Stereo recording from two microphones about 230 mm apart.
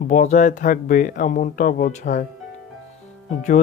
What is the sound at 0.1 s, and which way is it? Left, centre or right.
Speech, left.